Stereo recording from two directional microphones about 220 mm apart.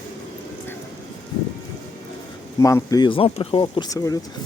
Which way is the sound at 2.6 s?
15° left (ahead or behind).